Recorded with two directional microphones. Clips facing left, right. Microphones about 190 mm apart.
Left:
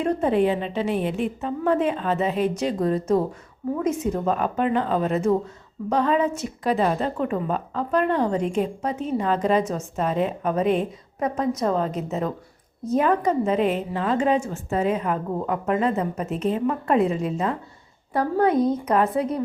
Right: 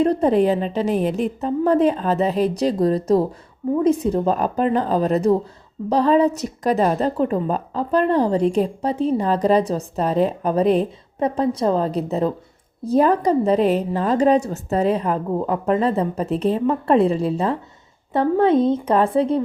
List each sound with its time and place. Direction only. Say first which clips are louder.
0.0 s a woman's voice: right 4 dB; 35° right (ahead or behind)